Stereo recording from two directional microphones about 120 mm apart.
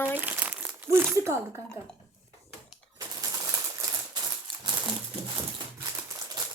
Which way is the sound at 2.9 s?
30° right (ahead or behind).